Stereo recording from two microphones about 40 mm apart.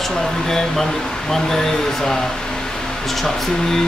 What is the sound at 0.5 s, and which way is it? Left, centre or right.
Speech, centre.